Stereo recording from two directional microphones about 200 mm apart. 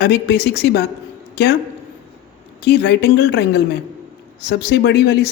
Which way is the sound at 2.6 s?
55° left (ahead or behind).